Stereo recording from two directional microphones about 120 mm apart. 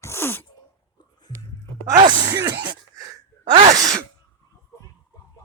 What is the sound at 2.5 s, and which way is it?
Sneeze, 40° right (ahead or behind).